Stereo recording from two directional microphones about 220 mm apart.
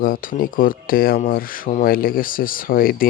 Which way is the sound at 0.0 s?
40° left (ahead or behind).